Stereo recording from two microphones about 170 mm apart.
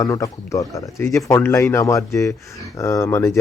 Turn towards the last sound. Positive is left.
turn(degrees=15)  # may be behind; listen again after turning